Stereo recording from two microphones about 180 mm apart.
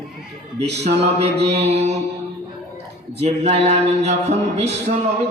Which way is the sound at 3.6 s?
35° right (ahead or behind).